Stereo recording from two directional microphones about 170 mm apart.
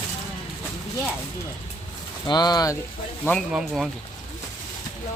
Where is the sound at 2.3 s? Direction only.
25° left (ahead or behind).